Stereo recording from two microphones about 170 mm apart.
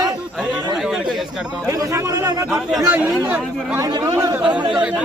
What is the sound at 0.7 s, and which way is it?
Speech, centre (ahead or behind).